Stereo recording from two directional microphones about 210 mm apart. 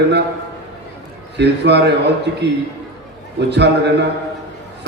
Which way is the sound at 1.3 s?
55° right (ahead or behind).